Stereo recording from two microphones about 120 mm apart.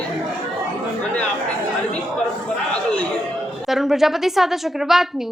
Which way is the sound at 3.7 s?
5° right (ahead or behind).